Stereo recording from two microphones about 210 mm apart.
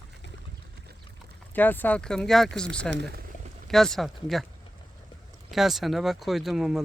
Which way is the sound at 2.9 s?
55° right (ahead or behind).